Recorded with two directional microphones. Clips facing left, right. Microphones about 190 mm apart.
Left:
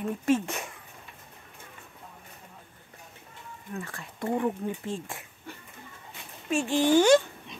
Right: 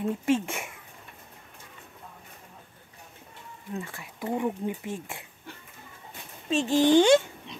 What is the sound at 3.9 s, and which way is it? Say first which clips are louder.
Speech: left 3 dB; 10° right (ahead or behind).